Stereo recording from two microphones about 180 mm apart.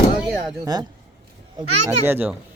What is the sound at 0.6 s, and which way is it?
Speech, 20° right (ahead or behind).